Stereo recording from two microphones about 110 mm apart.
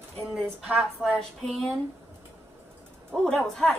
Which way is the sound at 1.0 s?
10° left (ahead or behind).